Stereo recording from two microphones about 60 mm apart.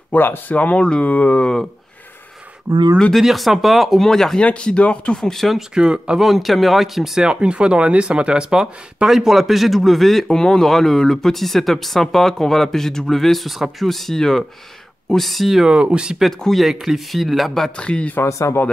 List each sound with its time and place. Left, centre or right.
0.1 s speech: left
0.6 s speech: centre
3.1 s speech: centre
4.4 s speech: centre
5.8 s speech: centre
7.2 s speech: centre
15.7 s speech: centre
16.2 s speech: centre
17.7 s speech: centre
18.1 s speech: left